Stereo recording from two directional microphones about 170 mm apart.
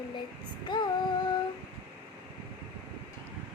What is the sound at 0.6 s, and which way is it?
Speech, 25° left (ahead or behind).